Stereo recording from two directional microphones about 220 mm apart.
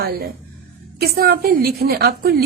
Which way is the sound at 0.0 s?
45° right (ahead or behind).